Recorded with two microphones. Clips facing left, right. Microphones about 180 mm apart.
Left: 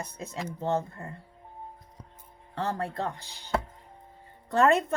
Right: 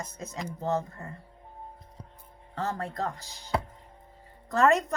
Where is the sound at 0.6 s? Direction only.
30° left (ahead or behind).